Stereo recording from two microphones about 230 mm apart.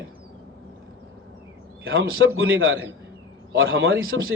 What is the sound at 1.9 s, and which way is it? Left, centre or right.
A man's voice, right.